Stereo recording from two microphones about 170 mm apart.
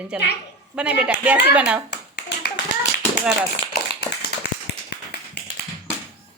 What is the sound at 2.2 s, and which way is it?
Clapping, 85° left.